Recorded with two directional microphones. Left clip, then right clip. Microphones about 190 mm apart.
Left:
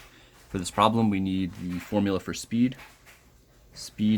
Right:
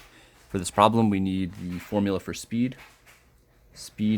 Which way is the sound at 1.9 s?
30° right (ahead or behind).